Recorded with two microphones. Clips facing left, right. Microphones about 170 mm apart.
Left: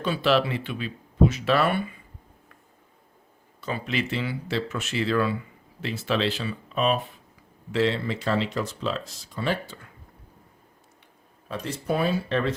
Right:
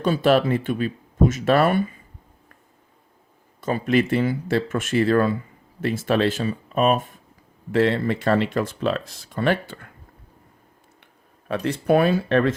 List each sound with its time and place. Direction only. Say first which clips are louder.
0.0 s speech: right 5 dB; 45° right (ahead or behind)
3.6 s speech: right 8 dB; 45° right (ahead or behind)
11.4 s speech: right 8 dB; 65° right (ahead or behind)